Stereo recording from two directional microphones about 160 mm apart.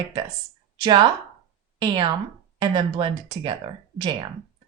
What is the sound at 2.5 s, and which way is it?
Speech, 30° right (ahead or behind).